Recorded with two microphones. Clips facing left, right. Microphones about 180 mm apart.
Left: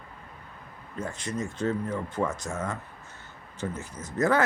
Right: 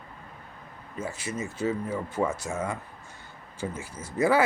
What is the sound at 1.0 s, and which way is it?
Speech, 5° right (ahead or behind).